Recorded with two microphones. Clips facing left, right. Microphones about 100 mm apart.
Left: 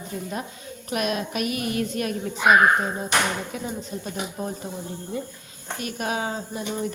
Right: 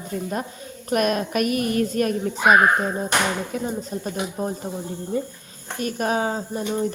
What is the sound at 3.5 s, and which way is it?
Speech, 45° right (ahead or behind).